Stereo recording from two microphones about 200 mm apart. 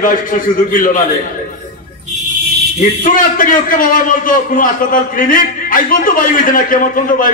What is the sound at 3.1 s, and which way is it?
A man's voice, 45° left (ahead or behind).